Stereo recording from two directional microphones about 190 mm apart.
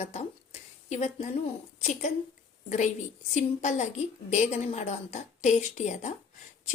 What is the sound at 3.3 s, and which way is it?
A woman's voice, 40° left (ahead or behind).